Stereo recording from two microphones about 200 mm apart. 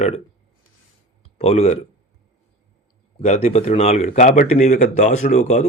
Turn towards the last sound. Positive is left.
turn(degrees=35)  # may be behind; listen again after turning